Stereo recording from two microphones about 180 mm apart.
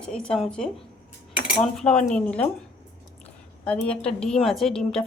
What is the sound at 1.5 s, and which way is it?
A woman's voice, centre (ahead or behind).